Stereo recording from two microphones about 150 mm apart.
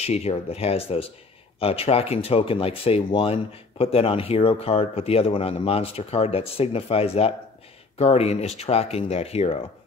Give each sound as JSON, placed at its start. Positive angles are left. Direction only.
{"t": 0.0, "sound": "speech", "side_deg": 45}